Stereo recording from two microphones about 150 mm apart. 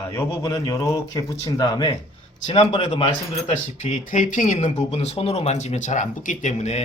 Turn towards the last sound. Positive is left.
turn(degrees=50)  # may be behind; listen again after turning